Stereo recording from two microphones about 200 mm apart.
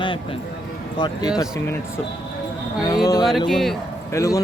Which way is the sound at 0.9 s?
20° left (ahead or behind).